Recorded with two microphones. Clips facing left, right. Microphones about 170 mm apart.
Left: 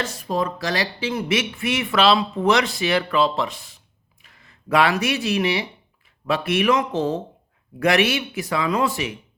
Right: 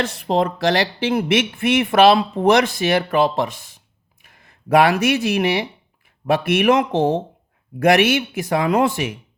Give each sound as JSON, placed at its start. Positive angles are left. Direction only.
{"t": 0.0, "sound": "speech", "side_deg": -65}